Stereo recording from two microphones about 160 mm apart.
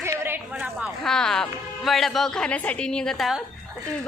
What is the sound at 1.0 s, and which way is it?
A woman's voice, 5° left (ahead or behind).